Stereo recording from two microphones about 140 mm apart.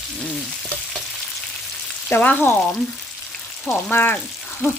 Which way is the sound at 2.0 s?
15° left (ahead or behind).